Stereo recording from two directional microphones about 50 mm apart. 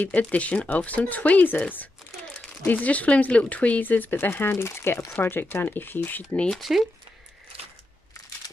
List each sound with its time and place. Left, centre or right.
0.0 s speech: left
2.6 s speech: left
5.2 s speech: left
6.5 s speech: centre